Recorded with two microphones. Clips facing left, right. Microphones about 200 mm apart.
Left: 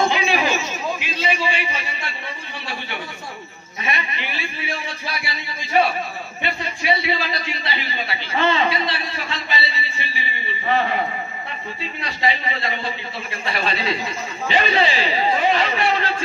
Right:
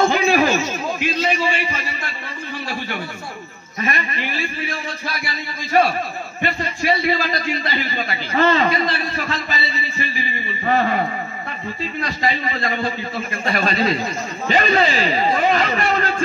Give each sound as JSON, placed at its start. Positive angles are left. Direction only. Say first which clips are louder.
{"t": 0.1, "sound": "a sound", "louder": "right 4 dB", "side_deg": -45}
{"t": 3.8, "sound": "a man's voice", "louder": "right 3 dB", "side_deg": -45}
{"t": 12.0, "sound": "a man's voice", "louder": "right 1 dB", "side_deg": -45}